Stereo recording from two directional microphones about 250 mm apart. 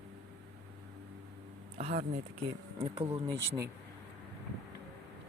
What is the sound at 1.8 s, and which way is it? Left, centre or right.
Speech, right.